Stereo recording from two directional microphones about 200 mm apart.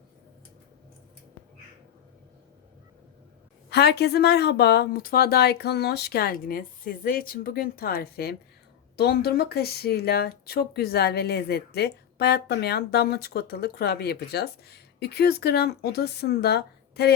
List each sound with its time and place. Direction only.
3.7 s speech: 55° left (ahead or behind)